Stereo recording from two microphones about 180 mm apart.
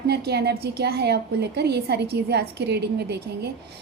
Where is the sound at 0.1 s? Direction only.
65° right (ahead or behind).